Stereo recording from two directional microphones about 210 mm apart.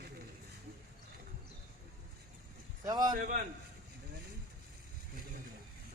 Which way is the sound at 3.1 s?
40° right (ahead or behind).